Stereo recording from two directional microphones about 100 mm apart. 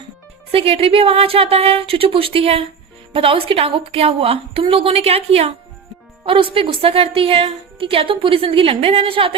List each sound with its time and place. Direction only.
0.5 s a woman's voice: 70° right (ahead or behind); by 5.5 s 90° right
6.2 s a woman's voice: 60° right (ahead or behind)